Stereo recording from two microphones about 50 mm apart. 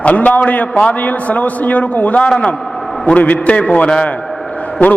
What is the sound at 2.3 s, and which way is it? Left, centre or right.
Speech, centre.